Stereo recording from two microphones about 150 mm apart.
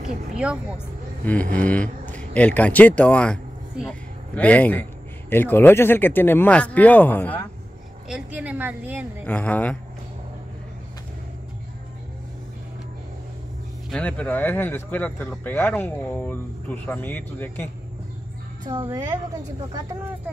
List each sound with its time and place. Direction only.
1.2 s speech: 10° left (ahead or behind)
4.4 s speech: 10° left (ahead or behind)
8.1 s a woman's voice: 10° right (ahead or behind)
9.2 s speech: 10° left (ahead or behind)
13.8 s speech: 5° left (ahead or behind)
18.9 s a woman's voice: 25° right (ahead or behind)